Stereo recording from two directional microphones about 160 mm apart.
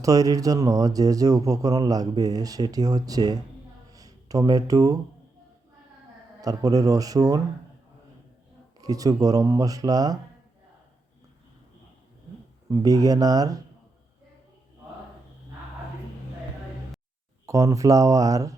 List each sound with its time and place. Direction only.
0.0 s speech: 20° right (ahead or behind)
6.4 s speech: 20° right (ahead or behind)
8.8 s speech: 20° right (ahead or behind)
12.6 s speech: 20° right (ahead or behind)
17.4 s speech: 20° right (ahead or behind)